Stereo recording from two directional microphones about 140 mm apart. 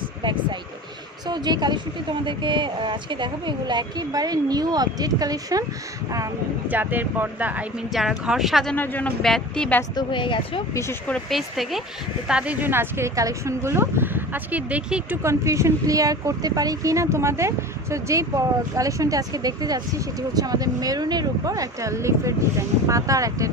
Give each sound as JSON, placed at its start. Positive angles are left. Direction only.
{"t": 0.2, "sound": "a woman's voice", "side_deg": -35}
{"t": 6.7, "sound": "speech", "side_deg": -10}
{"t": 8.7, "sound": "a woman's voice", "side_deg": 15}
{"t": 9.9, "sound": "a woman's voice", "side_deg": 35}
{"t": 10.7, "sound": "speech", "side_deg": 20}
{"t": 11.1, "sound": "speech", "side_deg": 0}
{"t": 15.2, "sound": "speech", "side_deg": -20}